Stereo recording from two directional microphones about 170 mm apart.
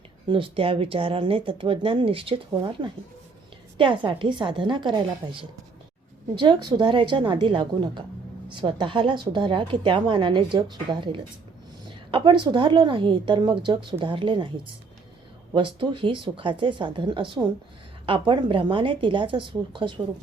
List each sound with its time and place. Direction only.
0.3 s a woman's voice: 30° right (ahead or behind)
15.5 s a woman's voice: 30° right (ahead or behind)